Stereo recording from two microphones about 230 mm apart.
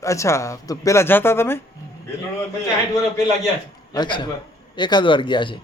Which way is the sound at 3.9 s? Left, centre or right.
Centre.